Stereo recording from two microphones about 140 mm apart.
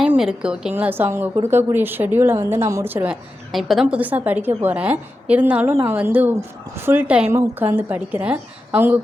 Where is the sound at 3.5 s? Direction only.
Centre (ahead or behind).